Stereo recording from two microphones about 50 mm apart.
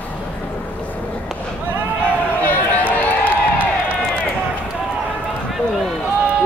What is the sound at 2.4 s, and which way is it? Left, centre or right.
Run, left.